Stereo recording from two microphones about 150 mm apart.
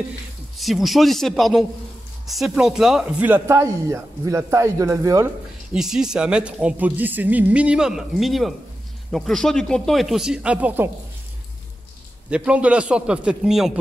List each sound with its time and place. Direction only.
0.6 s speech: centre (ahead or behind); by 5.3 s 20° right (ahead or behind)
5.7 s speech: 5° right (ahead or behind)
12.3 s speech: 10° right (ahead or behind)